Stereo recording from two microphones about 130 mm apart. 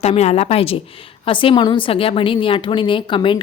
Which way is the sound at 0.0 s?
55° left (ahead or behind).